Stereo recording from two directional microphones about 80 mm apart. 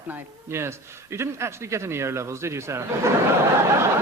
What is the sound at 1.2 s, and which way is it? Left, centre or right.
Speech, right.